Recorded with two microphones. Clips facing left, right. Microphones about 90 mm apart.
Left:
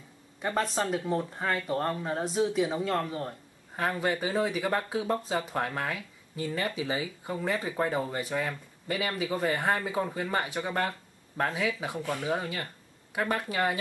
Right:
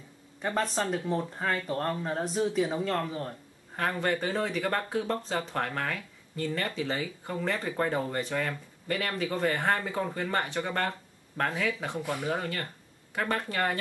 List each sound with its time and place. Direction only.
0.4 s speech: 5° left (ahead or behind)
12.0 s speech: 15° right (ahead or behind)
12.3 s speech: 10° left (ahead or behind)